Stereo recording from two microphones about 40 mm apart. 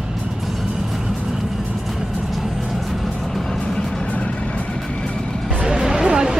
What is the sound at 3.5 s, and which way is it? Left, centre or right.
Music, left.